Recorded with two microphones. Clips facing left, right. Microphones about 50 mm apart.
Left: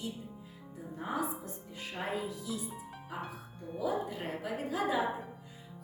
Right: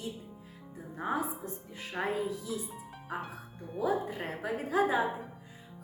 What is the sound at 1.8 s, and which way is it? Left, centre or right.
Speech, right.